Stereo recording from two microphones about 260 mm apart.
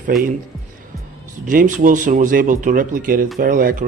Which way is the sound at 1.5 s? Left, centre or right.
Right.